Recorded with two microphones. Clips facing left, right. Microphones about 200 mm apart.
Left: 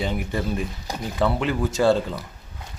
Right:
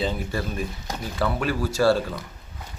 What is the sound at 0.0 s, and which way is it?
Speech, 20° left (ahead or behind).